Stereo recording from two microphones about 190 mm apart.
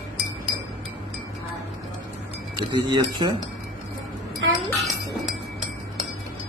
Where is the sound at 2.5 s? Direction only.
20° right (ahead or behind).